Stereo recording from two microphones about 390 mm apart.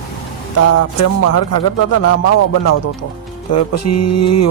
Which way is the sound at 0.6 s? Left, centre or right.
Left.